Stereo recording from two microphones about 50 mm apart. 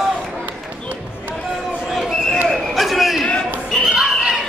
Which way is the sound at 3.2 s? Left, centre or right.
Left.